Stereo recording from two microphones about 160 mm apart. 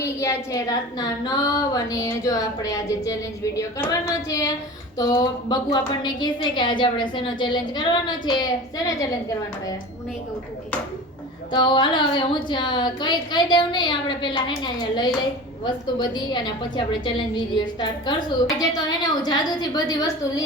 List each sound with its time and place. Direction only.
0.0 s a woman's voice: 20° left (ahead or behind)
11.5 s a woman's voice: 30° left (ahead or behind)